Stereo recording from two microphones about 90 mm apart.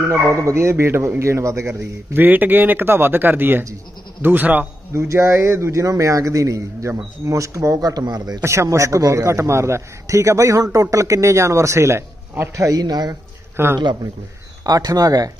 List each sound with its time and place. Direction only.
0.4 s a man's voice: 30° right (ahead or behind)
4.9 s a man's voice: 35° right (ahead or behind)
8.4 s a man's voice: 30° right (ahead or behind)
12.7 s speech: 50° right (ahead or behind)
13.6 s a man's voice: 25° right (ahead or behind)
14.6 s speech: 45° right (ahead or behind)